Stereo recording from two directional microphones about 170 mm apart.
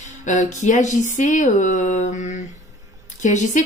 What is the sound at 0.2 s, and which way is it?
Speech, 45° left (ahead or behind).